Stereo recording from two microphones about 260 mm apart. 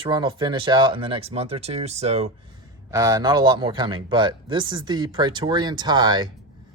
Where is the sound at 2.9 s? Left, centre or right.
Centre.